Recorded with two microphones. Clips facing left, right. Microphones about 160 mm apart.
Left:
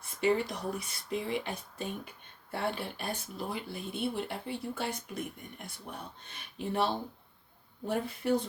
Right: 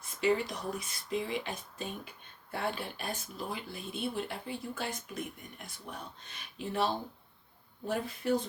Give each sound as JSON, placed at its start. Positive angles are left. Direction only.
{"t": 0.0, "sound": "speech", "side_deg": 55}